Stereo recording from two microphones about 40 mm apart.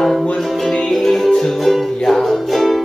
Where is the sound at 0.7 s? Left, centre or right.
Centre.